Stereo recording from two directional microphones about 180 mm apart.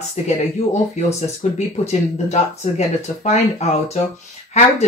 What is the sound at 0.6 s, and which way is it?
Speech, 35° left (ahead or behind).